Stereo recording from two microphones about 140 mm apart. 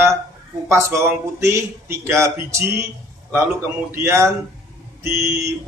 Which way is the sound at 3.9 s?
20° right (ahead or behind).